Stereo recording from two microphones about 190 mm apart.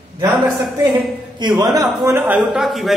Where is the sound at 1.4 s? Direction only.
20° right (ahead or behind); by 3.0 s centre (ahead or behind).